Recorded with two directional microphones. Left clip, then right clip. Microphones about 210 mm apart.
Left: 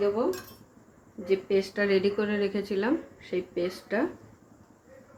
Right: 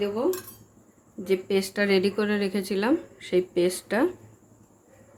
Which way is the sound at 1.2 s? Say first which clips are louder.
Right 1 dB; 45° right (ahead or behind).